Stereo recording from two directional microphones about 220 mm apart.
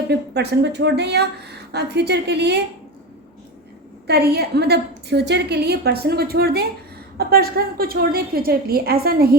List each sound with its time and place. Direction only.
0.1 s a woman's voice: 50° right (ahead or behind)
4.0 s a woman's voice: 45° right (ahead or behind)